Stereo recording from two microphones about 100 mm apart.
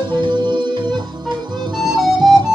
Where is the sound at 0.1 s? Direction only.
50° right (ahead or behind).